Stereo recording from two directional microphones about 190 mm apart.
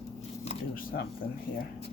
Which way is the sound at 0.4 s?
50° left (ahead or behind).